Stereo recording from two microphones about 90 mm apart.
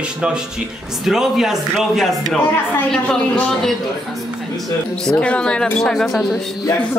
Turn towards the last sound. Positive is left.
turn(degrees=5)  # may be behind; listen again after turning